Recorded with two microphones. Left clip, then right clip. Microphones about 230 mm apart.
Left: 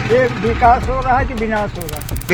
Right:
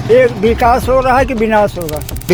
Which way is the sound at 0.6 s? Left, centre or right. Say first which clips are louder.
Right 1 dB; right.